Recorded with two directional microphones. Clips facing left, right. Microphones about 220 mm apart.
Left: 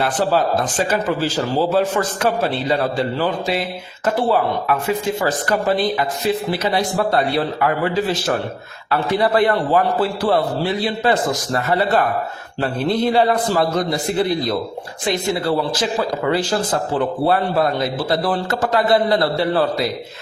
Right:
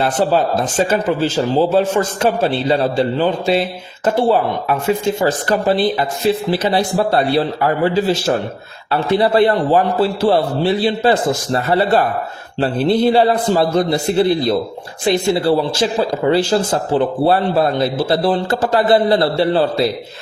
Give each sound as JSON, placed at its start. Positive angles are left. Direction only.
{"t": 0.5, "sound": "speech", "side_deg": -25}